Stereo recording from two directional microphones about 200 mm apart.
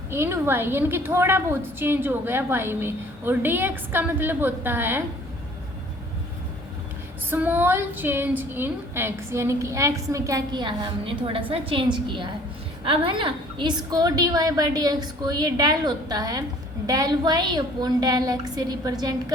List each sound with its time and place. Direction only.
0.1 s a woman's voice: 10° right (ahead or behind)
7.3 s a woman's voice: 10° right (ahead or behind)